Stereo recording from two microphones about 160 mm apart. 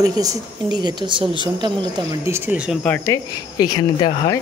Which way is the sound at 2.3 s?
10° right (ahead or behind).